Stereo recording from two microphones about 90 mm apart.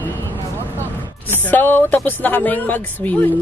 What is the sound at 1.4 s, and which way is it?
Speech, 20° left (ahead or behind).